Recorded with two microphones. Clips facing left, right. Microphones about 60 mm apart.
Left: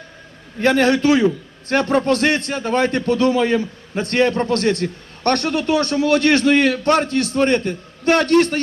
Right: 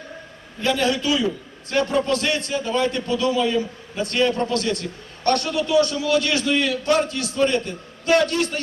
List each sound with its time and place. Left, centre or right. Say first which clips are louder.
0.6 s a man's voice: left 6 dB; left